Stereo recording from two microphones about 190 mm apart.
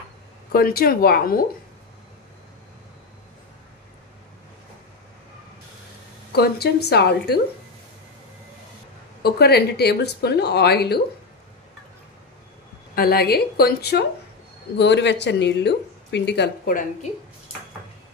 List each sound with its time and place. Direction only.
0.5 s speech: 55° left (ahead or behind)
6.3 s speech: 60° left (ahead or behind)
9.2 s speech: 55° left (ahead or behind)
12.9 s speech: 55° left (ahead or behind)